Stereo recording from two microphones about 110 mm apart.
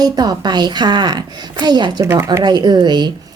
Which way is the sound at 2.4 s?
40° right (ahead or behind).